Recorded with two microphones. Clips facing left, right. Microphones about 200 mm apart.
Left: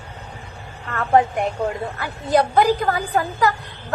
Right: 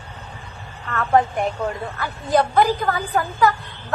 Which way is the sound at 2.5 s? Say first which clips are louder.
Left 1 dB; 40° left (ahead or behind).